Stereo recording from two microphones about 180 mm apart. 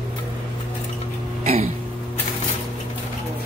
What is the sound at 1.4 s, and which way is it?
Throat clearing, 35° right (ahead or behind).